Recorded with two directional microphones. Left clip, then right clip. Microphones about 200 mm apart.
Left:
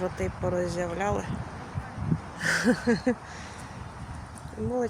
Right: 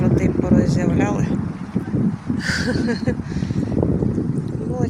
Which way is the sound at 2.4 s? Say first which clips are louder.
Right 2 dB; 20° left (ahead or behind).